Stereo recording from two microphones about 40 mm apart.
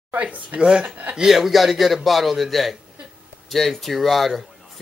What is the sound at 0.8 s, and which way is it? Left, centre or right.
Speech, right.